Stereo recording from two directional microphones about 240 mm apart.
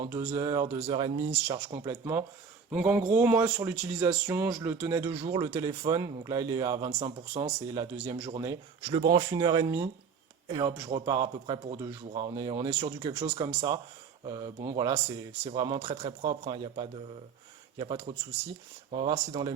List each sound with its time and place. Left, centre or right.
0.1 s speech: centre